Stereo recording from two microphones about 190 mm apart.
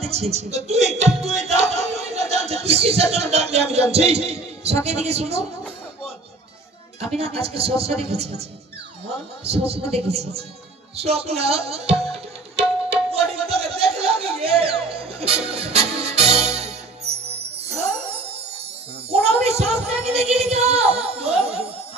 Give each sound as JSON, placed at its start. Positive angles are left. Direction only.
{"t": 0.0, "sound": "music", "side_deg": -35}
{"t": 7.2, "sound": "a woman's voice", "side_deg": -30}
{"t": 11.0, "sound": "tabla", "side_deg": -30}
{"t": 17.9, "sound": "music", "side_deg": -30}
{"t": 19.0, "sound": "a sound", "side_deg": -35}